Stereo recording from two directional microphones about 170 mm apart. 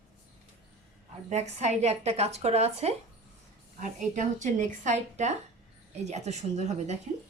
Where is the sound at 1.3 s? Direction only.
40° right (ahead or behind).